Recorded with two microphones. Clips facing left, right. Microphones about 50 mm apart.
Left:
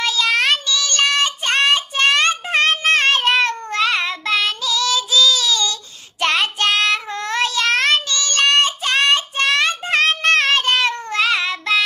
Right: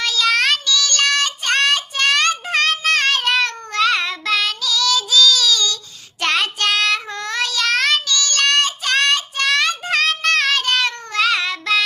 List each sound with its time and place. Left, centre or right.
0.0 s child singing: left